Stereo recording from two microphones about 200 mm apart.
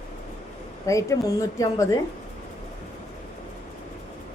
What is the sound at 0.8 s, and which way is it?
A woman's voice, 15° left (ahead or behind).